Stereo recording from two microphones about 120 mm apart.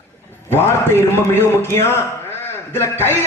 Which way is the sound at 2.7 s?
20° left (ahead or behind).